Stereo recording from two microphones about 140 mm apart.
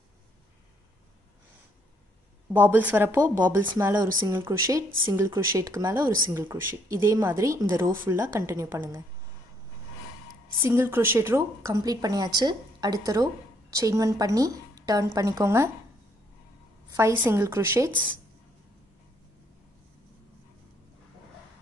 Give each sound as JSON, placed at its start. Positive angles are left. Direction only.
{"t": 2.5, "sound": "a woman's voice", "side_deg": -10}
{"t": 10.6, "sound": "a woman's voice", "side_deg": -20}
{"t": 16.9, "sound": "a woman's voice", "side_deg": -20}